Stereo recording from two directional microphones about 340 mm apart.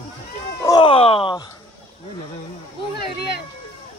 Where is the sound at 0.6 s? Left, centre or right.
Centre.